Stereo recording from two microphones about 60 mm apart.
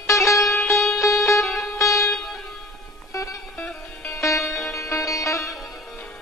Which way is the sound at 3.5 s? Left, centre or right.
Left.